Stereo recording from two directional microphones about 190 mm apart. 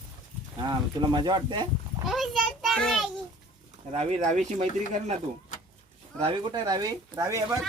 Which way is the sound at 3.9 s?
35° right (ahead or behind).